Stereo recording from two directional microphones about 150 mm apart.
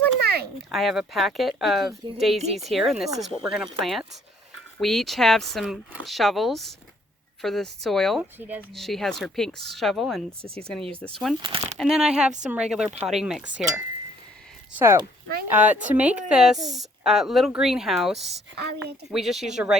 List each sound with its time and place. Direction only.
0.7 s speech: centre (ahead or behind)
8.2 s a woman's voice: 10° right (ahead or behind)
8.7 s speech: centre (ahead or behind)
11.4 s speech: 40° right (ahead or behind)
11.8 s a woman's voice: 5° right (ahead or behind)
18.6 s a woman's voice: 90° right
19.1 s speech: centre (ahead or behind)